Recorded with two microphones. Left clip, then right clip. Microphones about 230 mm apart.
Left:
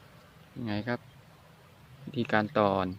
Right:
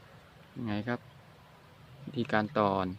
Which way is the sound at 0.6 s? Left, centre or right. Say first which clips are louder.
Left 2 dB; centre.